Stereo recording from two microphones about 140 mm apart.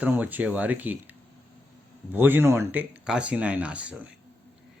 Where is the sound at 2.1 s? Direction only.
15° right (ahead or behind).